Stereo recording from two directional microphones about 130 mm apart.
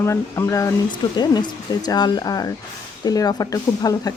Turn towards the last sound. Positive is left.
turn(degrees=30)  # may be behind; listen again after turning